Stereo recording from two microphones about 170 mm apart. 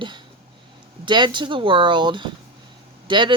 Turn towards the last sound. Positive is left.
turn(degrees=-25)  # may be behind; listen again after turning